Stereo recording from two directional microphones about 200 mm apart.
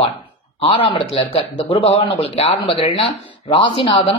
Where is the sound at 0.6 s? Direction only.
25° left (ahead or behind).